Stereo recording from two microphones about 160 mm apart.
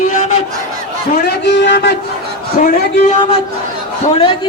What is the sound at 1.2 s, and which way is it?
Speech, 90° left.